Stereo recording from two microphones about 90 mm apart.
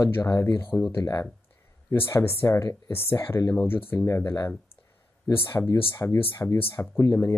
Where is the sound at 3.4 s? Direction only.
40° left (ahead or behind).